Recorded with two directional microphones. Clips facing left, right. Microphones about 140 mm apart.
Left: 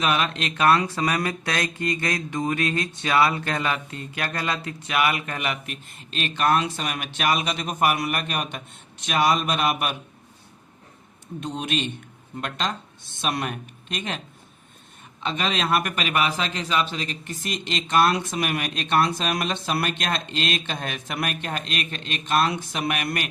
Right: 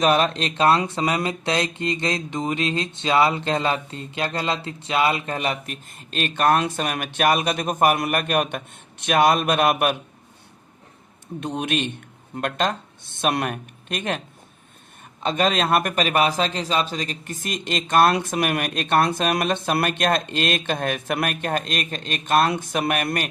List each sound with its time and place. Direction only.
0.0 s speech: 35° right (ahead or behind); by 9.9 s 50° right (ahead or behind)
11.3 s a man's voice: 60° right (ahead or behind)
15.2 s a man's voice: 40° right (ahead or behind)